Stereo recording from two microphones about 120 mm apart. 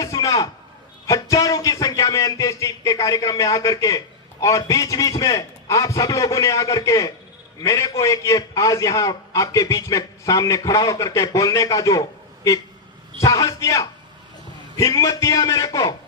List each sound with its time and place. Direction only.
0.0 s a sound: 25° left (ahead or behind)
1.0 s a man's voice: 25° left (ahead or behind)
13.1 s a man's voice: 25° left (ahead or behind)